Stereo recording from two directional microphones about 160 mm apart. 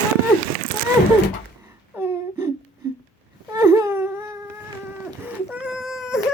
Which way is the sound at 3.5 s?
20° right (ahead or behind).